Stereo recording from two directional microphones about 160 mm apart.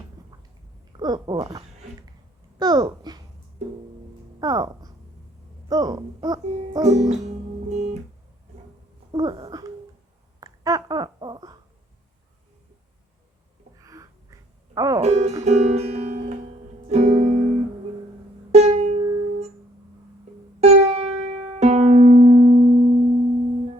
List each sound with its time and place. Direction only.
0.9 s a sound: 25° right (ahead or behind)
2.6 s speech: 25° right (ahead or behind)
4.4 s speech: 25° right (ahead or behind)
5.6 s music: 25° right (ahead or behind)
6.8 s music: 45° right (ahead or behind)
7.7 s guitar: 45° right (ahead or behind)
9.1 s a sound: 25° right (ahead or behind)
10.4 s babbling: 25° right (ahead or behind)
13.7 s a sound: 20° right (ahead or behind)
14.8 s music: 20° right (ahead or behind)
15.0 s music: 45° right (ahead or behind)
18.5 s music: 40° right (ahead or behind)
20.6 s music: 40° right (ahead or behind)